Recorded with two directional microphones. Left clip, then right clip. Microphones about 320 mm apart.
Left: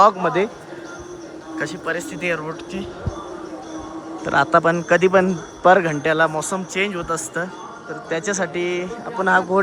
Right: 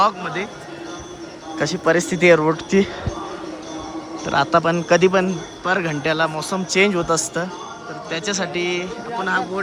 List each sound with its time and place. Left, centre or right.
0.0 s a man's voice: centre
1.5 s a man's voice: centre
4.3 s a man's voice: centre